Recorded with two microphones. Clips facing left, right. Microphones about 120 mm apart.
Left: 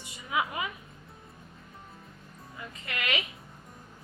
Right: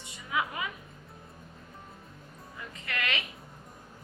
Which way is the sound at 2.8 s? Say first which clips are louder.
Left 1 dB; 15° left (ahead or behind).